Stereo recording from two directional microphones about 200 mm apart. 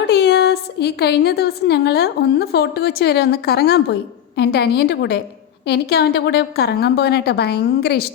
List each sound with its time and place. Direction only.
0.1 s a woman's voice: 55° left (ahead or behind)